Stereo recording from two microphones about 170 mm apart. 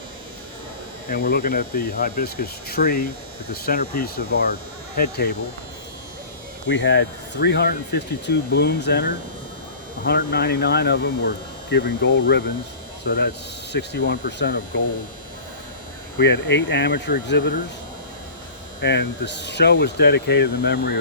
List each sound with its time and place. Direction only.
1.1 s speech: 65° left (ahead or behind)
6.7 s speech: 90° left
16.1 s speech: 75° left (ahead or behind)
18.8 s speech: 80° left